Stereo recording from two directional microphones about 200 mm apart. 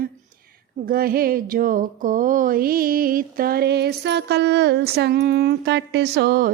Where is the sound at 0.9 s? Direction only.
45° right (ahead or behind).